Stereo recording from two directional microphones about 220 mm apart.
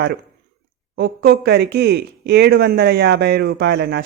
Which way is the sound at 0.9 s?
45° right (ahead or behind).